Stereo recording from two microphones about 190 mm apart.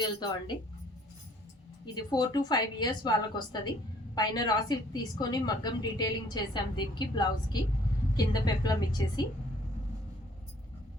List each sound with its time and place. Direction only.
0.0 s a woman's voice: 20° left (ahead or behind)
1.8 s a woman's voice: 20° left (ahead or behind)